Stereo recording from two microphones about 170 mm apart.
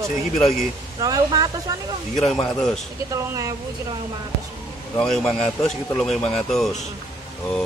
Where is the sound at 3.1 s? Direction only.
20° right (ahead or behind).